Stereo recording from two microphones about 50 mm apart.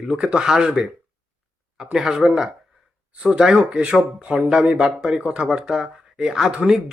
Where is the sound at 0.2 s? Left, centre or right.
Centre.